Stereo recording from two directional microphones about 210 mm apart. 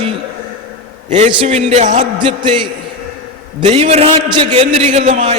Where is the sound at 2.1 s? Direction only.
20° right (ahead or behind).